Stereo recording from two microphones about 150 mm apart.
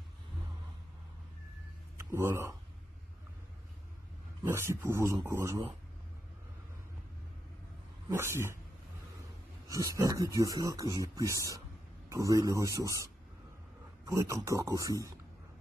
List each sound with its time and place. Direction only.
2.0 s speech: 15° right (ahead or behind)
4.4 s speech: 20° right (ahead or behind)
8.2 s speech: 20° right (ahead or behind)
9.7 s speech: 20° right (ahead or behind)